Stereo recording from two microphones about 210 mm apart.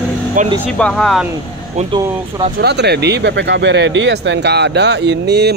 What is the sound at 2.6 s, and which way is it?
Speech, 50° right (ahead or behind).